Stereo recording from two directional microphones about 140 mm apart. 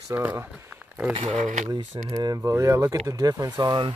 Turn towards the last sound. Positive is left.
turn(degrees=-30)  # may be behind; listen again after turning